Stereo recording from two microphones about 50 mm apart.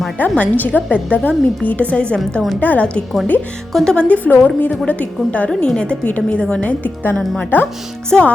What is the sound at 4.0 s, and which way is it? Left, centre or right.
A woman's voice, left.